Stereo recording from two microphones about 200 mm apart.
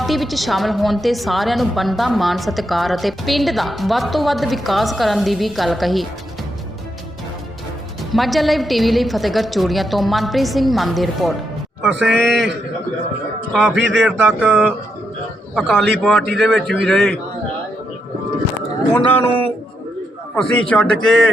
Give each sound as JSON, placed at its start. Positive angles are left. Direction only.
{"t": 0.0, "sound": "a woman's voice", "side_deg": 0}
{"t": 8.1, "sound": "a woman's voice", "side_deg": 0}
{"t": 13.5, "sound": "a woman's voice", "side_deg": 0}
{"t": 20.3, "sound": "a woman's voice", "side_deg": 5}